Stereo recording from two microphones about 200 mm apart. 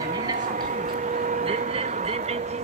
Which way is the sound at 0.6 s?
40° right (ahead or behind).